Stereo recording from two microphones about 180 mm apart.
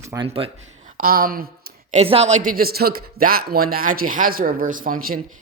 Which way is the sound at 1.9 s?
35° right (ahead or behind).